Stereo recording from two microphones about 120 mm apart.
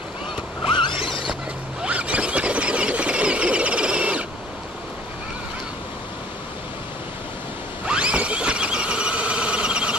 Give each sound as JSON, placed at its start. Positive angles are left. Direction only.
{"t": 0.9, "sound": "a sound", "side_deg": -5}
{"t": 1.8, "sound": "squeal", "side_deg": -10}
{"t": 7.8, "sound": "squeal", "side_deg": -10}